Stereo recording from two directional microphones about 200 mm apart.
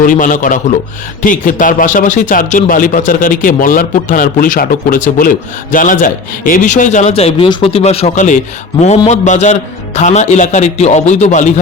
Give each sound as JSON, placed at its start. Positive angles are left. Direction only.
{"t": 0.0, "sound": "speech", "side_deg": 40}